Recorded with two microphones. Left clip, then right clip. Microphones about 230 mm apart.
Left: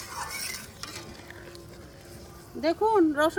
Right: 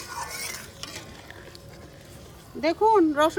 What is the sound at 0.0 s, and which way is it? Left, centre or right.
Stir, centre.